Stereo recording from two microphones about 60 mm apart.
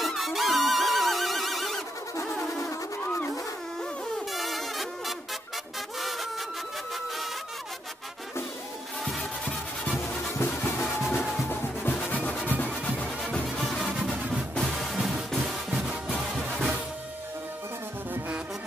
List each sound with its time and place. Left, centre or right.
0.0 s music: centre
3.0 s a sound: left
4.3 s music: centre
9.0 s music: centre
10.6 s music: left
14.7 s music: centre